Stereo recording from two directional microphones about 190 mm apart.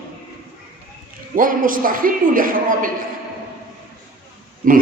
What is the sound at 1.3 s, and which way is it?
A man's voice, 45° right (ahead or behind).